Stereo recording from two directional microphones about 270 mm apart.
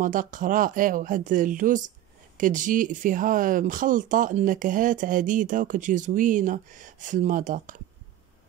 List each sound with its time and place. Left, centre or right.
0.0 s speech: right